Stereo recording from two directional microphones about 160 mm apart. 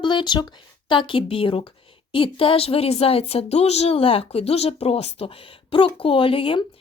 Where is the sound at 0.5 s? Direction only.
30° left (ahead or behind).